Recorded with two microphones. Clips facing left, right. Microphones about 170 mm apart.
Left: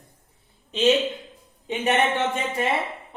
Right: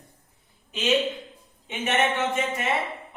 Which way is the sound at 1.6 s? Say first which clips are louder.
Left 3 dB; 35° left (ahead or behind).